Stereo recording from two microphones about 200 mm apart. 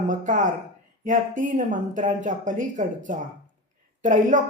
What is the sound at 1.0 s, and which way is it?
A woman's voice, 40° right (ahead or behind).